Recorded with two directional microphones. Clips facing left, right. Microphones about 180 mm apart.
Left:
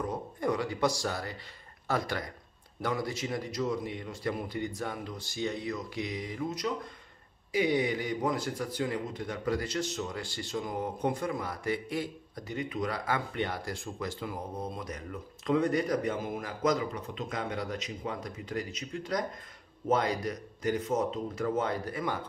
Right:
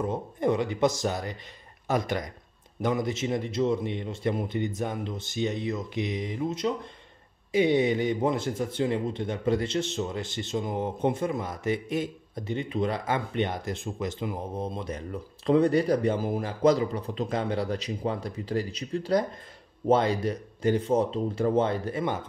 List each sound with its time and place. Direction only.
0.0 s speech: 25° right (ahead or behind)